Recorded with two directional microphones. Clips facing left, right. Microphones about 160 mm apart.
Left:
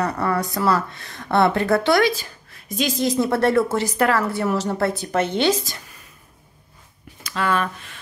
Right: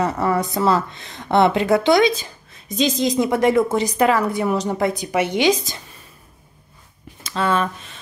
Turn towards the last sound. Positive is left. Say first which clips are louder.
# right 2 dB
turn(degrees=-25)  # may be behind; listen again after turning